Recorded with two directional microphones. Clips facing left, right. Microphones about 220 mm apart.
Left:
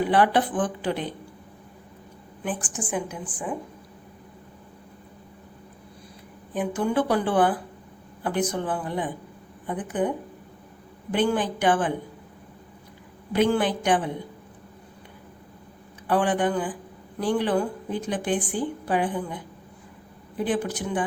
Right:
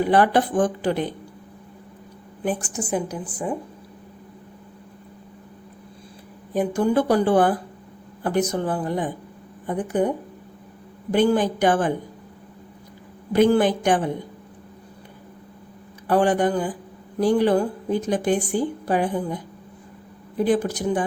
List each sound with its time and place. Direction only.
0.1 s speech: 45° right (ahead or behind)
2.4 s a woman's voice: 40° right (ahead or behind)
6.5 s a woman's voice: 40° right (ahead or behind)
11.1 s a woman's voice: 40° right (ahead or behind)
13.3 s speech: 45° right (ahead or behind)
16.0 s a woman's voice: 40° right (ahead or behind)
20.4 s a woman's voice: 40° right (ahead or behind)